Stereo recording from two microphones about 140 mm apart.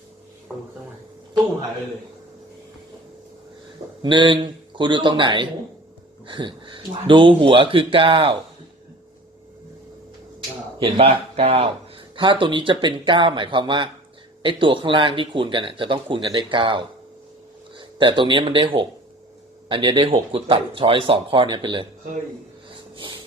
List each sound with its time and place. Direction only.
4.0 s speech: 35° right (ahead or behind)
10.8 s speech: 45° right (ahead or behind)